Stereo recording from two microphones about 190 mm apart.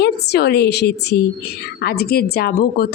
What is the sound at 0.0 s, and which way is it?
A woman's voice, 60° left (ahead or behind).